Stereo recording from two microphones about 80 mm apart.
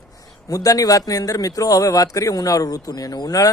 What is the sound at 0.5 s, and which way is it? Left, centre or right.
Speech, left.